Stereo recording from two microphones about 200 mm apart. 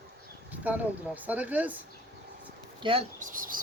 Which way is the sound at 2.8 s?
30° right (ahead or behind).